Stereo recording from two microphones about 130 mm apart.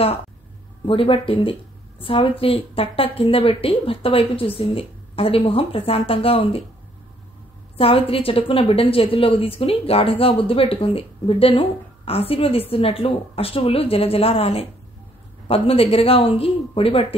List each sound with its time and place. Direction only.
0.8 s a woman's voice: 45° left (ahead or behind)
7.7 s a woman's voice: 45° left (ahead or behind)